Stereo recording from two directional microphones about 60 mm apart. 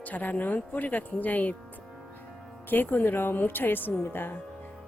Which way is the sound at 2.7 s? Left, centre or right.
Left.